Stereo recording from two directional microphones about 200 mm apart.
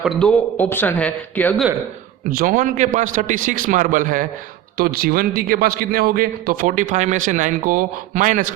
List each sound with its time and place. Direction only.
0.0 s speech: centre (ahead or behind)
2.3 s a man's voice: 40° right (ahead or behind)